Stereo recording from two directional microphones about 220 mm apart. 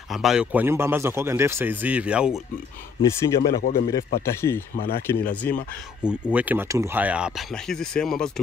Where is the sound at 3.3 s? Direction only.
45° left (ahead or behind).